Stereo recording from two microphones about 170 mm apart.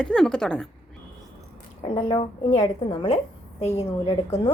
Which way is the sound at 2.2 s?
40° left (ahead or behind).